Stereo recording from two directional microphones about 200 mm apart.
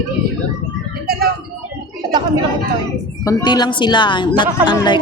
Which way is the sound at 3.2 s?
20° left (ahead or behind).